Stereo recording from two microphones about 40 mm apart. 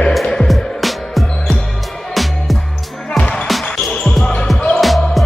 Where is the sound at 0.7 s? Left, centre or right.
Centre.